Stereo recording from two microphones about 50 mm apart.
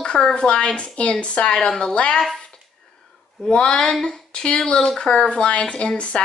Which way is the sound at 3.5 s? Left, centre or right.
Centre.